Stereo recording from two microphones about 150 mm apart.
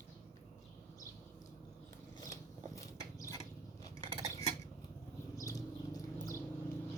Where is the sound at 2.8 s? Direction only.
20° left (ahead or behind).